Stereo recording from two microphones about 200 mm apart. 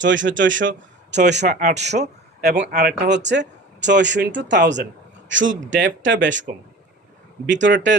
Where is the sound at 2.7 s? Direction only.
55° right (ahead or behind).